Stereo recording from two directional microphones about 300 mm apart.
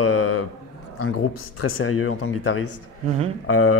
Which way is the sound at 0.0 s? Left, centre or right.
Left.